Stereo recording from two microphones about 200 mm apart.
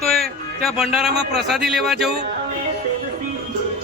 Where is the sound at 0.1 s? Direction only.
Centre (ahead or behind).